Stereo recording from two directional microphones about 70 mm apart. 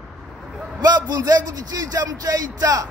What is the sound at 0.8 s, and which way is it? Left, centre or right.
A man's voice, right.